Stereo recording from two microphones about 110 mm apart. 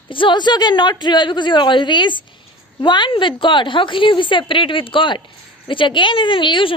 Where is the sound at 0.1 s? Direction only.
50° left (ahead or behind).